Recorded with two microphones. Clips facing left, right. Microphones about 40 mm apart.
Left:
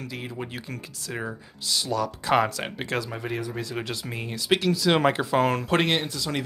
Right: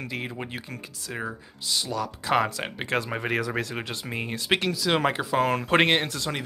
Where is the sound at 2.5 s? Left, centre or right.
Centre.